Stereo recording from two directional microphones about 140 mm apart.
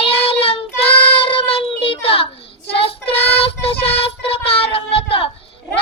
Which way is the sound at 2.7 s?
45° left (ahead or behind).